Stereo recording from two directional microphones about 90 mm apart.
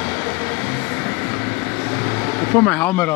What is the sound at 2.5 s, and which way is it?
Speech, 25° left (ahead or behind).